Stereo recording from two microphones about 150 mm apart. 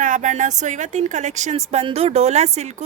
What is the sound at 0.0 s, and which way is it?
A woman's voice, 55° right (ahead or behind).